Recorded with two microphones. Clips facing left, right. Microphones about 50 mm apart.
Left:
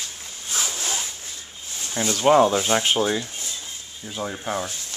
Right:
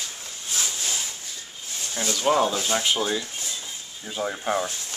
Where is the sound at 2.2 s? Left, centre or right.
Left.